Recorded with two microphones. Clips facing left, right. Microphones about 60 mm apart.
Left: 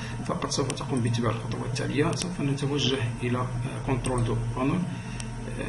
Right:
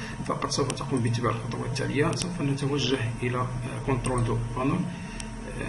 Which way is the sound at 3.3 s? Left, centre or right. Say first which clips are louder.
Right 1 dB; centre.